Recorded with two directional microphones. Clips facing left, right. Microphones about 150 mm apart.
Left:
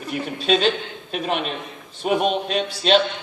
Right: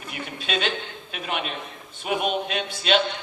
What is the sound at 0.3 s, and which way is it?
Speech, 35° left (ahead or behind).